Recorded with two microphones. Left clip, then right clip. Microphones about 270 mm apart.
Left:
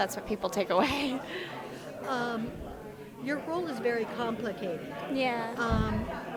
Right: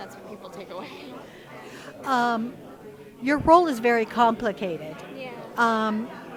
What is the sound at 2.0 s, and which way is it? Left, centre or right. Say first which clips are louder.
A woman's voice: right 9 dB; right.